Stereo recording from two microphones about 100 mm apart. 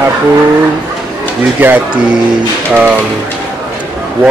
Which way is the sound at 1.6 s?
20° right (ahead or behind).